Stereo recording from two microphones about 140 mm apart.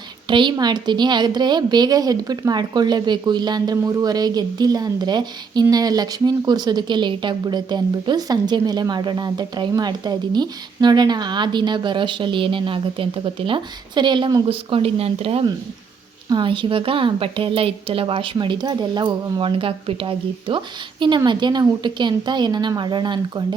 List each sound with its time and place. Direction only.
0.3 s a woman's voice: 35° right (ahead or behind)
14.4 s speech: 40° right (ahead or behind)